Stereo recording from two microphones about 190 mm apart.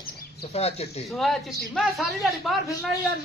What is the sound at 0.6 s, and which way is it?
Speech, 35° left (ahead or behind).